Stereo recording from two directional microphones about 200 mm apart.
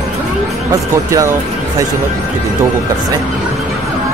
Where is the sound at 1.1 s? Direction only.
15° right (ahead or behind).